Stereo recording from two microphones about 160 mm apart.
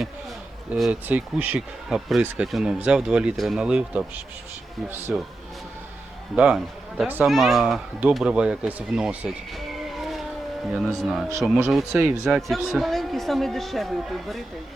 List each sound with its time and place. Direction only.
0.7 s speech: 10° right (ahead or behind)
6.3 s speech: 5° right (ahead or behind)